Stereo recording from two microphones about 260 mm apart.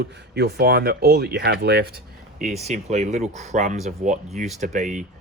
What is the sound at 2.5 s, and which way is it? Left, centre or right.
Speech, right.